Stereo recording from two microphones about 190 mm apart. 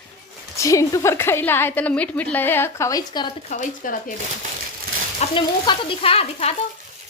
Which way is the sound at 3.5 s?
45° left (ahead or behind).